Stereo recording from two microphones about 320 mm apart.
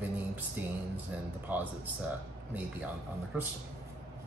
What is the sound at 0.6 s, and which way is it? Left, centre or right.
Music, centre.